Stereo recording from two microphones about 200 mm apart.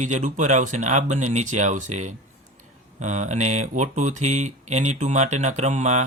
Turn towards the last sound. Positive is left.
turn(degrees=-35)  # may be behind; listen again after turning